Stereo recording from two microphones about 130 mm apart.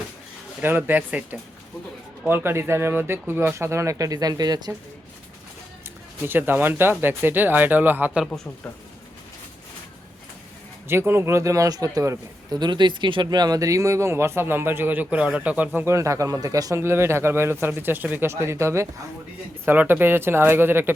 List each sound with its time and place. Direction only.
0.6 s a man's voice: 15° right (ahead or behind); by 4.7 s 30° right (ahead or behind)
6.2 s speech: 15° right (ahead or behind)
10.8 s a man's voice: 20° right (ahead or behind)